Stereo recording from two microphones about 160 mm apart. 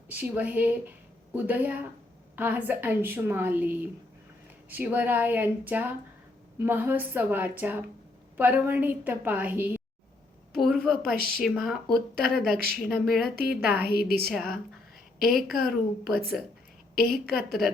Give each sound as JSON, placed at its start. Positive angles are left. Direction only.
{"t": 0.1, "sound": "a woman's voice", "side_deg": -10}
{"t": 10.5, "sound": "a sound", "side_deg": 0}
{"t": 11.3, "sound": "speech", "side_deg": 0}
{"t": 12.5, "sound": "speech", "side_deg": -70}
{"t": 12.8, "sound": "speech", "side_deg": -5}
{"t": 13.7, "sound": "a woman's voice", "side_deg": -85}
{"t": 14.3, "sound": "speech", "side_deg": 5}